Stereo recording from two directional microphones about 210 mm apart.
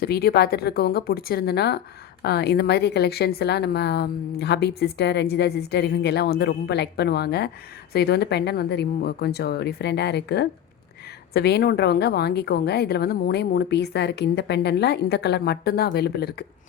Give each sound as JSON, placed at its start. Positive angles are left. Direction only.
{"t": 0.0, "sound": "a woman's voice", "side_deg": 45}